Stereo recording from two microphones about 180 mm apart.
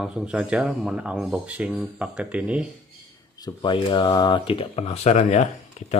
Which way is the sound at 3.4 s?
25° left (ahead or behind).